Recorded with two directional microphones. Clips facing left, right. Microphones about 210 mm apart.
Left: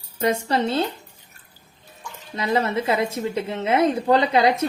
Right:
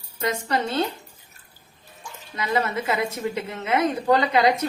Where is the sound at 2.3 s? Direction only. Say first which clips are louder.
Left 3 dB; 30° left (ahead or behind).